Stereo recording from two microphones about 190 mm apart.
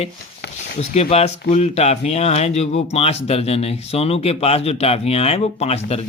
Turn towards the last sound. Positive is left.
turn(degrees=35)  # may be behind; listen again after turning